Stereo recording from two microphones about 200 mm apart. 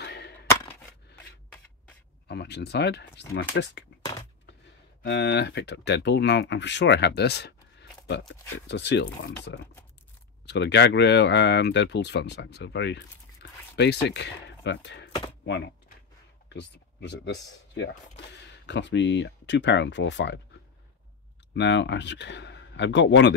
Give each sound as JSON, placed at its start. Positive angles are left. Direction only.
{"t": 0.0, "sound": "a sound", "side_deg": 60}
{"t": 2.2, "sound": "speech", "side_deg": 60}
{"t": 5.0, "sound": "speech", "side_deg": 60}
{"t": 21.5, "sound": "speech", "side_deg": 60}